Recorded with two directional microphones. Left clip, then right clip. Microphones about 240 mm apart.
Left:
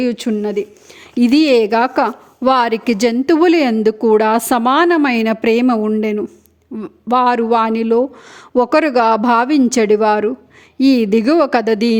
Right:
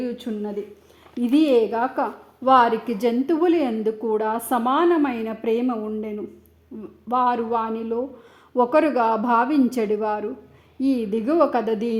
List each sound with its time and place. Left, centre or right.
0.0 s a woman's voice: left